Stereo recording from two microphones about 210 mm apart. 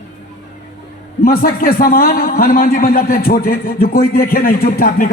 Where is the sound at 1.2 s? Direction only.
45° left (ahead or behind).